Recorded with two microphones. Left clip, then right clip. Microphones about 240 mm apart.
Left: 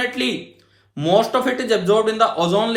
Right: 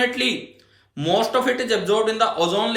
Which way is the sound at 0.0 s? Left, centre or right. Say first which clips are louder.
Right 1 dB; left.